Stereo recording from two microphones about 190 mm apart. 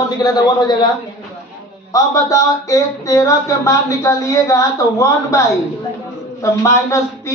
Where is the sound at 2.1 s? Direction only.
15° left (ahead or behind).